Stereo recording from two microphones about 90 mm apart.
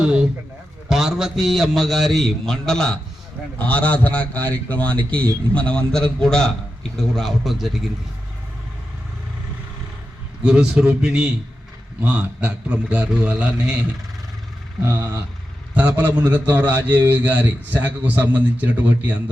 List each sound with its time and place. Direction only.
0.0 s a man's voice: 10° right (ahead or behind)
10.4 s a man's voice: 10° right (ahead or behind)
15.7 s a man's voice: 15° right (ahead or behind)